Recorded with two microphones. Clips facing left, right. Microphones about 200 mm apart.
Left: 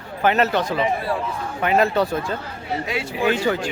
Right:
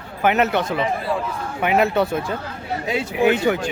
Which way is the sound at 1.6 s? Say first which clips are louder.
Even; 15° right (ahead or behind).